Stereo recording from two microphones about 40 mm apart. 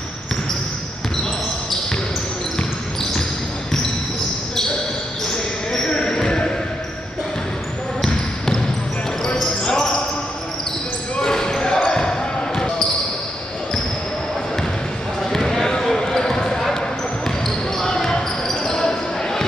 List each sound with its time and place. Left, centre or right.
5.3 s basketball bounce: centre
9.4 s basketball bounce: centre
11.1 s basketball bounce: centre
15.2 s basketball bounce: centre